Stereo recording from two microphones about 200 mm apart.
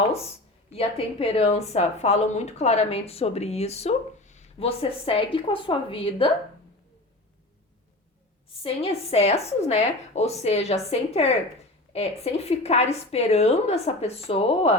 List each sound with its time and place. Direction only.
0.1 s a woman's voice: 30° left (ahead or behind)
8.5 s a woman's voice: 30° left (ahead or behind)